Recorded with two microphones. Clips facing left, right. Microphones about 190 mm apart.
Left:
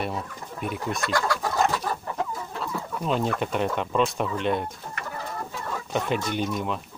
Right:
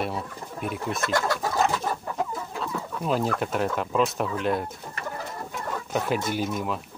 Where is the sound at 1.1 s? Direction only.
25° right (ahead or behind).